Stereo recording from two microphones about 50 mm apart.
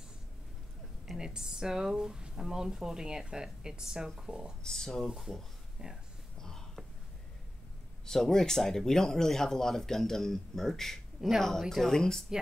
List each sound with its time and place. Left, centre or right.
1.1 s speech: centre
4.6 s speech: centre
6.4 s a sound: centre
8.0 s speech: centre
11.1 s speech: centre
11.7 s speech: centre